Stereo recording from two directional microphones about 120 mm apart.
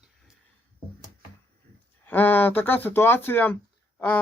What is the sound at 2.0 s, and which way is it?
Speech, 15° left (ahead or behind).